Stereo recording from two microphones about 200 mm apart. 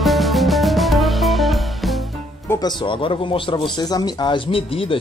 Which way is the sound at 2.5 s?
20° left (ahead or behind).